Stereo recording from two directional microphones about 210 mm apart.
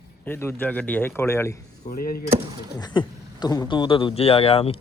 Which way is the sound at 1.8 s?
45° left (ahead or behind).